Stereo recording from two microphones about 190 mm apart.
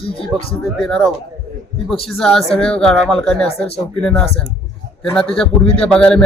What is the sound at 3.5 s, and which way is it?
Speech, 30° left (ahead or behind).